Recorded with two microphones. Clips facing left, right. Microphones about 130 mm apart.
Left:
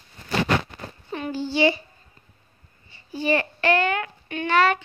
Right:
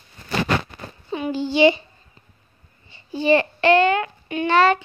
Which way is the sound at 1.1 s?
15° right (ahead or behind).